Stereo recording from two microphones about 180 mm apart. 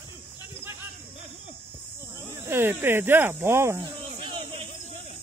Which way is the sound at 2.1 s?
15° right (ahead or behind).